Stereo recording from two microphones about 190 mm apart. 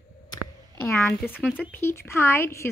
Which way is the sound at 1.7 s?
15° left (ahead or behind).